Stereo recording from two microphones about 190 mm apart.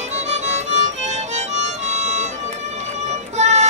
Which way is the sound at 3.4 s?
35° right (ahead or behind).